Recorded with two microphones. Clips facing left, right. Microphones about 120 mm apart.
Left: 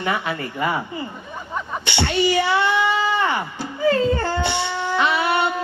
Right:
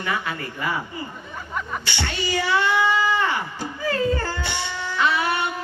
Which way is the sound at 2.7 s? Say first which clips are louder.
Left 1 dB; 20° left (ahead or behind).